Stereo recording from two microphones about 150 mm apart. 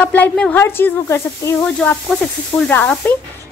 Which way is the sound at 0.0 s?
10° left (ahead or behind).